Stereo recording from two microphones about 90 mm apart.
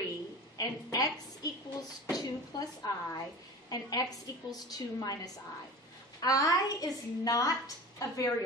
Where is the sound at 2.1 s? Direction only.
45° left (ahead or behind).